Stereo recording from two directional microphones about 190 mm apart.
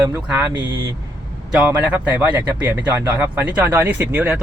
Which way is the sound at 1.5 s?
5° right (ahead or behind).